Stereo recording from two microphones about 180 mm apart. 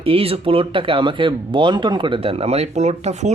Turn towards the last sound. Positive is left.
turn(degrees=-40)  # may be behind; listen again after turning